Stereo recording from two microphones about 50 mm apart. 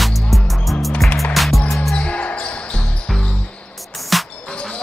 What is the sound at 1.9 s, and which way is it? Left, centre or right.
Basketball bounce, left.